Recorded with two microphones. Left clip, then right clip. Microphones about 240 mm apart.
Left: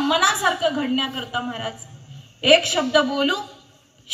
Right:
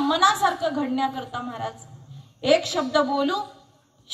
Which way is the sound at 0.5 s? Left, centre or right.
Left.